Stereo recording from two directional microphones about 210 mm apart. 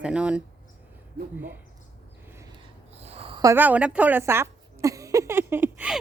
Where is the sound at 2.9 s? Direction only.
30° right (ahead or behind); by 5.9 s 10° right (ahead or behind).